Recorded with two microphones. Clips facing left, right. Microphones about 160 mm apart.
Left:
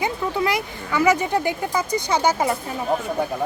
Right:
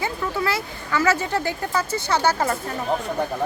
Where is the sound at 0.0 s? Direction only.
15° left (ahead or behind).